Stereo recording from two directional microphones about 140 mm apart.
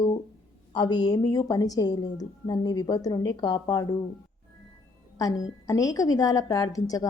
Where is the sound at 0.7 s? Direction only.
30° left (ahead or behind).